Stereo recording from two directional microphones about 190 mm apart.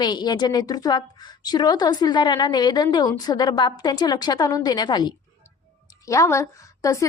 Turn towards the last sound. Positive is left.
turn(degrees=15)  # may be behind; listen again after turning